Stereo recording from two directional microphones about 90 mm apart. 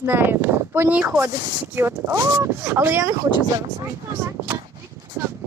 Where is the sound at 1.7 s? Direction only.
25° right (ahead or behind).